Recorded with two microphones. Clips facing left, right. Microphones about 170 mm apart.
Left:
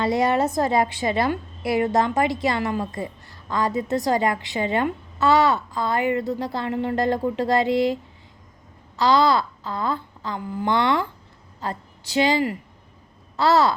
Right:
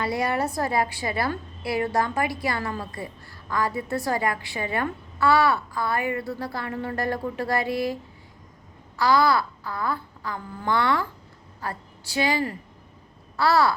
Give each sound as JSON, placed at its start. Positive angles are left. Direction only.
{"t": 0.0, "sound": "a woman's voice", "side_deg": 20}
{"t": 9.0, "sound": "a woman's voice", "side_deg": 20}